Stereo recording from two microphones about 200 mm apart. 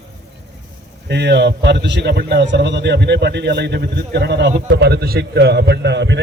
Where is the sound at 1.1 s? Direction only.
55° right (ahead or behind).